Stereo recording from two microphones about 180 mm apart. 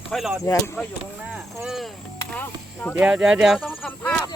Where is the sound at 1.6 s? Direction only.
Centre (ahead or behind).